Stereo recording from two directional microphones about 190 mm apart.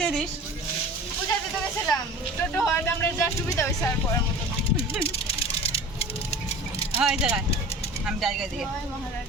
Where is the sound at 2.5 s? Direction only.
10° left (ahead or behind).